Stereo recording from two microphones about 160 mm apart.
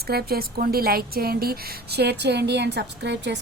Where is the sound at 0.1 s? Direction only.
75° right (ahead or behind).